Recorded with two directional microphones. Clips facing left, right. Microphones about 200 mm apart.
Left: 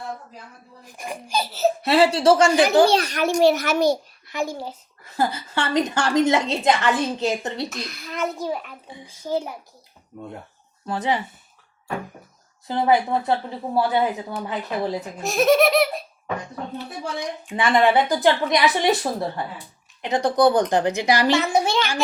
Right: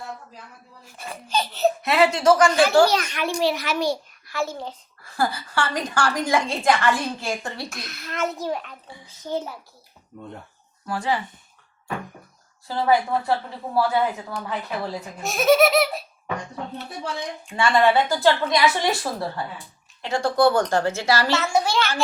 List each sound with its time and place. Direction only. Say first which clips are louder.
0.9 s a child's voice: left 2 dB; 15° left (ahead or behind)
1.8 s a child's voice: left 3 dB; 30° left (ahead or behind)
2.5 s a child's voice: left 1 dB; 20° left (ahead or behind); by 3.9 s 45° left (ahead or behind)
4.3 s a child's voice: left 1 dB; 15° left (ahead or behind)
5.0 s a woman's voice: left 1 dB; 20° left (ahead or behind)
7.8 s a child's voice: left 1 dB; centre (ahead or behind)
10.8 s a woman's voice: left 1 dB; 20° left (ahead or behind)
12.6 s a woman's voice: left 1 dB; 20° left (ahead or behind)
15.2 s laughter: even; centre (ahead or behind)
17.6 s a woman's voice: left 1 dB; 20° left (ahead or behind)